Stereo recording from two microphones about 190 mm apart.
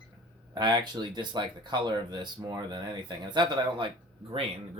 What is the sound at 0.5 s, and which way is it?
Speech, 25° right (ahead or behind).